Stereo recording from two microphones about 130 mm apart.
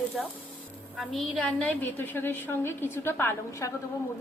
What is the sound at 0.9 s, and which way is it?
A woman's voice, centre (ahead or behind).